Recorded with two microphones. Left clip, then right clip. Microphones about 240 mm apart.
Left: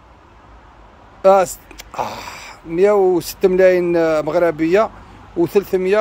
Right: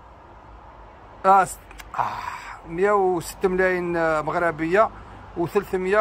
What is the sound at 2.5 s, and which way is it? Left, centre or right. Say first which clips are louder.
Speech: left 7 dB; left.